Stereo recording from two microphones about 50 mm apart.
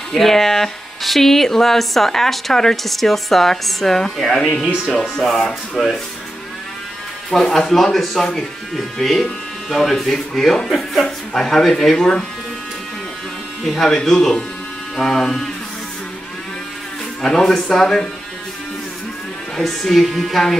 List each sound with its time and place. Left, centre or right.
0.1 s speech: centre
7.2 s speech: centre
13.7 s speech: centre
17.2 s speech: centre
19.5 s speech: centre